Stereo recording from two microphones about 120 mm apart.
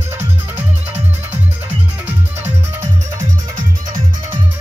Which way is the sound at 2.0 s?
15° right (ahead or behind).